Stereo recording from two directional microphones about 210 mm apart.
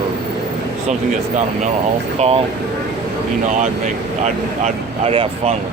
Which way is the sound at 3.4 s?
35° right (ahead or behind).